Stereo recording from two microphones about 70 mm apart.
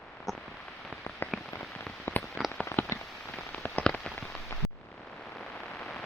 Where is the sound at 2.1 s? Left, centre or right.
Left.